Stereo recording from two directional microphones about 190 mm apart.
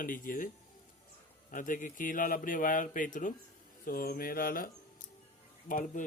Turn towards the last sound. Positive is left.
turn(degrees=45)  # may be behind; listen again after turning